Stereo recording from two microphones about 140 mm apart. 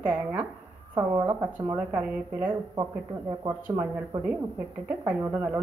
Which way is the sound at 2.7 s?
30° right (ahead or behind).